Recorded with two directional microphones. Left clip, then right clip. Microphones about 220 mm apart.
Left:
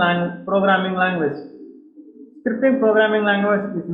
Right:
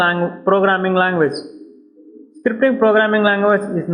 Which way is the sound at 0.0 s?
45° right (ahead or behind).